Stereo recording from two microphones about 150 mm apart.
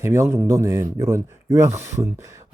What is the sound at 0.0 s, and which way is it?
Speech, 15° right (ahead or behind).